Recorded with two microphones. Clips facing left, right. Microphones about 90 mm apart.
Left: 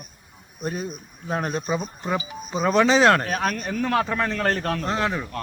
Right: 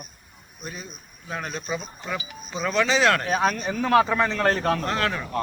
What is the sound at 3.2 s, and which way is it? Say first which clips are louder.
A man's voice: right 2 dB; 5° right (ahead or behind).